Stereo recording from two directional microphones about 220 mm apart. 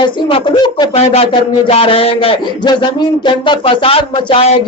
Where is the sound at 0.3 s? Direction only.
20° left (ahead or behind).